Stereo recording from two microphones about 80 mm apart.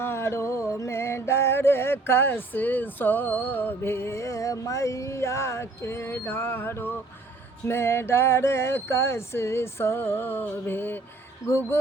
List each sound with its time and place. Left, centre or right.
0.0 s music: left
11.4 s music: left